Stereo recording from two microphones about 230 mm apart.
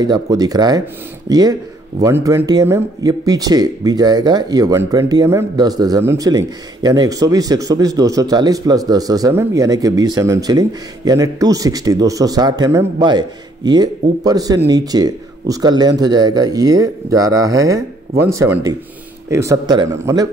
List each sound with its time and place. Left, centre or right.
0.0 s speech: centre